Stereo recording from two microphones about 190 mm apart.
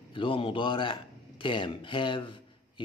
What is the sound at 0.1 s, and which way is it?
Speech, 25° left (ahead or behind).